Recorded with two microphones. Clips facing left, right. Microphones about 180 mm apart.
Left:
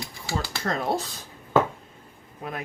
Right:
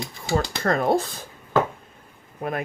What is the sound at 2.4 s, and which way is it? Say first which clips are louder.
Speech: right 6 dB; 55° right (ahead or behind).